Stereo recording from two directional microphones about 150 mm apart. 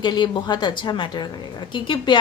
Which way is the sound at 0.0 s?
30° left (ahead or behind).